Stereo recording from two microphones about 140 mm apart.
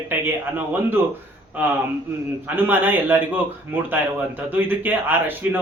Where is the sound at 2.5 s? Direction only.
15° right (ahead or behind).